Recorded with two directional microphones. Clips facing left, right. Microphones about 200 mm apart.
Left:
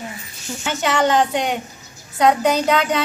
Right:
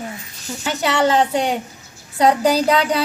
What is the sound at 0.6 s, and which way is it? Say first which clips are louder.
Speech: right 1 dB; 30° right (ahead or behind).